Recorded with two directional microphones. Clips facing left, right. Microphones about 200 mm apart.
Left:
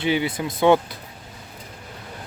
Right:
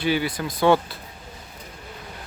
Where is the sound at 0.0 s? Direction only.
20° left (ahead or behind).